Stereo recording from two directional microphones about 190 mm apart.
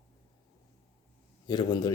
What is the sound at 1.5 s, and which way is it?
Speech, 20° left (ahead or behind).